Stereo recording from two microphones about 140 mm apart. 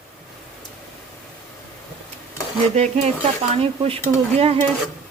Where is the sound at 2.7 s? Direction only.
55° right (ahead or behind).